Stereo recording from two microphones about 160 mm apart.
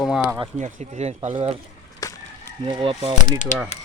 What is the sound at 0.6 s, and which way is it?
Speech, 45° right (ahead or behind).